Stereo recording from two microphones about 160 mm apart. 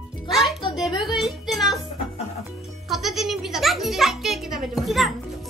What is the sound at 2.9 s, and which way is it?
Music, centre (ahead or behind).